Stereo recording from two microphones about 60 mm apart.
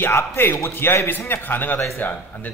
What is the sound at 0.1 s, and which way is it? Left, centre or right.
Speech, left.